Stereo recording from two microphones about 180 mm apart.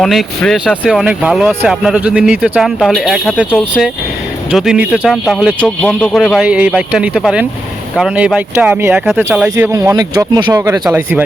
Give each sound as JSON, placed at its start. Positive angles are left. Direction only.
{"t": 0.0, "sound": "speech", "side_deg": 0}
{"t": 9.7, "sound": "speech", "side_deg": -20}
{"t": 10.8, "sound": "speech", "side_deg": -10}